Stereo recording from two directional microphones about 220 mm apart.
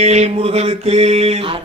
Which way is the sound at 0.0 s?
30° right (ahead or behind).